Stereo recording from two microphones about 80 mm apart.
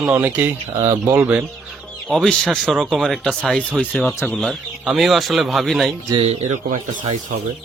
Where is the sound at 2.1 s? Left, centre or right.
Centre.